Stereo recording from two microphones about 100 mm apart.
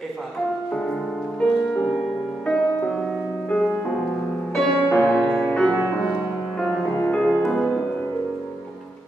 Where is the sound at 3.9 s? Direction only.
5° right (ahead or behind).